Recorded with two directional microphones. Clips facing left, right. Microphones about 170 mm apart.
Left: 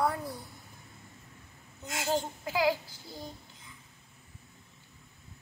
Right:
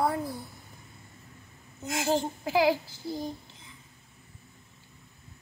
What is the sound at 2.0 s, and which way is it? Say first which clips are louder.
Child singing: right 3 dB; 25° right (ahead or behind).